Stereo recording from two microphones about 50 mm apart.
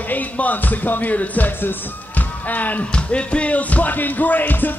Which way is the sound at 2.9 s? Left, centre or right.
Left.